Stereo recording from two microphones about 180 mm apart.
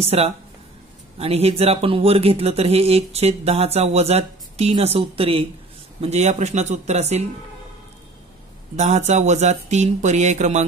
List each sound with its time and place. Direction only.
0.0 s speech: 35° right (ahead or behind)
8.7 s speech: 40° right (ahead or behind)